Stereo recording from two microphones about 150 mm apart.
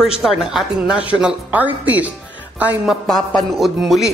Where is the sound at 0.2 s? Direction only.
Centre (ahead or behind).